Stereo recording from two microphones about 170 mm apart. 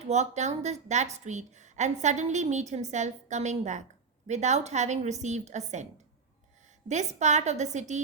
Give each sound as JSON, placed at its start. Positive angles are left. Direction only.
{"t": 0.0, "sound": "a woman's voice", "side_deg": -40}